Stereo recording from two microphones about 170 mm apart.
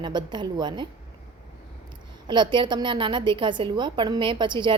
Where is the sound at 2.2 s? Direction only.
25° right (ahead or behind).